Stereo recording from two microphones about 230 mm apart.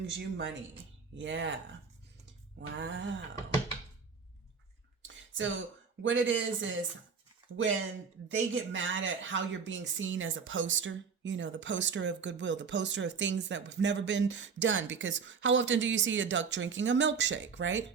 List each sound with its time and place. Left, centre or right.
0.0 s speech: right
2.6 s speech: right
5.0 s a sound: right
6.0 s speech: right
7.4 s a sound: right
8.4 s speech: right